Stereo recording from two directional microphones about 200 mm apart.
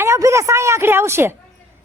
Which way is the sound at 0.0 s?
15° right (ahead or behind).